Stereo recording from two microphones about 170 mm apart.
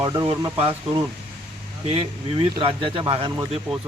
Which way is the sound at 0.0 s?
25° right (ahead or behind).